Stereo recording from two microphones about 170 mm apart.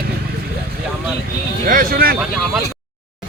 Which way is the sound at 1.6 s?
60° right (ahead or behind).